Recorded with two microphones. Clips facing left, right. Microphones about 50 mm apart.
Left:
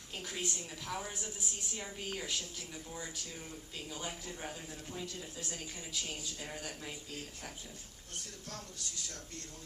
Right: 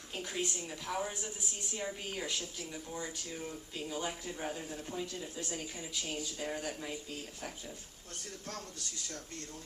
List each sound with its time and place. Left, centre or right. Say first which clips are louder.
0.1 s speech: right 3 dB; centre
3.5 s speech: right 5 dB; centre
4.5 s speech: right 4 dB; right